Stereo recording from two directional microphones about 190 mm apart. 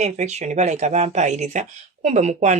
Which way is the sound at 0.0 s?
35° right (ahead or behind).